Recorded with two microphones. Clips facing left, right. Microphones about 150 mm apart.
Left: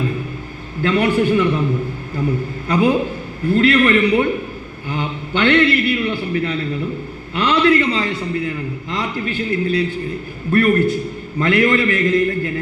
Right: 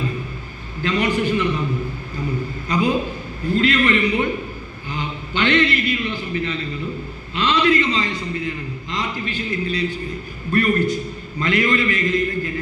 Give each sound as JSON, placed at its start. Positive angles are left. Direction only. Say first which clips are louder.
{"t": 0.8, "sound": "a man's voice", "louder": "left 4 dB", "side_deg": 60}
{"t": 2.6, "sound": "a man's voice", "louder": "left 4 dB", "side_deg": 60}